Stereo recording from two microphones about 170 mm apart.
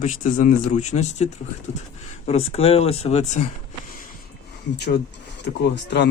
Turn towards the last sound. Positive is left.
turn(degrees=90)